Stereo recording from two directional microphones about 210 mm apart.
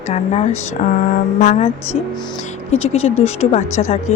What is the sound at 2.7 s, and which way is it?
Speech, 30° left (ahead or behind).